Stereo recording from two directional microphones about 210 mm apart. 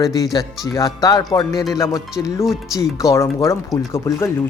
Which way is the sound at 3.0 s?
15° left (ahead or behind).